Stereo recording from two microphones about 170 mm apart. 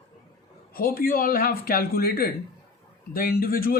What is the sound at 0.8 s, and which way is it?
Speech, 60° left (ahead or behind).